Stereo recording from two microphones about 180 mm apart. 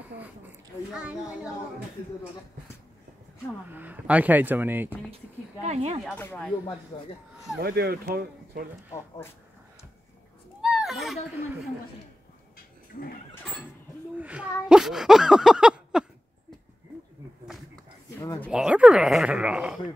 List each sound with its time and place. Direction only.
0.9 s speech: 5° right (ahead or behind)
3.7 s speech: 10° right (ahead or behind)
5.6 s speech: 35° right (ahead or behind)
6.1 s speech: 10° left (ahead or behind)
7.6 s speech: 60° right (ahead or behind)
10.6 s a sound: centre (ahead or behind)
14.1 s speech: 10° right (ahead or behind)
18.5 s speech: 5° right (ahead or behind)